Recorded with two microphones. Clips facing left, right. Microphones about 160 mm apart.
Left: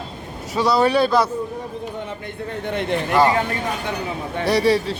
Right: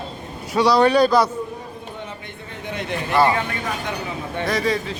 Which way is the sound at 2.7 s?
55° left (ahead or behind).